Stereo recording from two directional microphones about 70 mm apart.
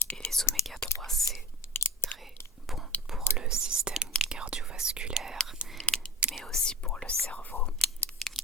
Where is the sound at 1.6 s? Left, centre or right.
Left.